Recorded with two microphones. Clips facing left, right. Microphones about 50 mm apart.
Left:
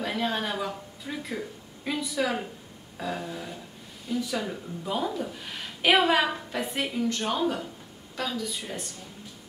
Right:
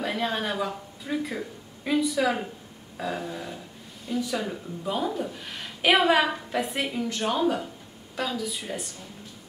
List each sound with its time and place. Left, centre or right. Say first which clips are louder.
0.0 s a woman's voice: right 1 dB; centre